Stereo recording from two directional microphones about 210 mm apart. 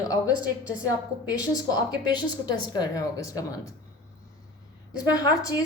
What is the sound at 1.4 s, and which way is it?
Speech, 20° left (ahead or behind).